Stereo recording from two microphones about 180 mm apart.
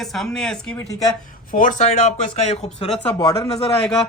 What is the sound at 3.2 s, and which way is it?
Speech, 20° left (ahead or behind).